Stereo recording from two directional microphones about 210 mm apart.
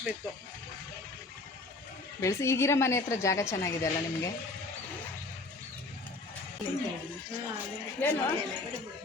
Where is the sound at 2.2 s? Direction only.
15° left (ahead or behind).